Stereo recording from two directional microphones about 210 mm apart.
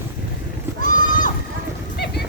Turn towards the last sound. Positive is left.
turn(degrees=40)  # may be behind; listen again after turning